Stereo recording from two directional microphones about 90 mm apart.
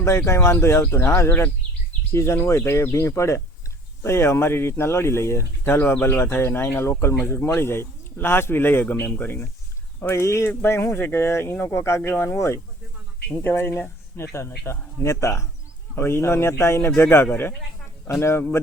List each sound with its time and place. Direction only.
0.0 s speech: 30° left (ahead or behind)